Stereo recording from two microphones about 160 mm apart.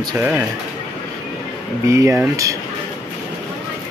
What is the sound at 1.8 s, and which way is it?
Speech, 15° right (ahead or behind).